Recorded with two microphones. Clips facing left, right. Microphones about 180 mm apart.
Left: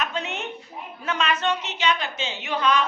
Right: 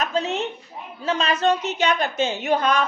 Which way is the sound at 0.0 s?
35° right (ahead or behind).